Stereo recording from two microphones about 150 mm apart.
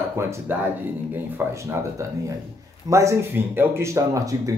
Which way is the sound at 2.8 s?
20° right (ahead or behind).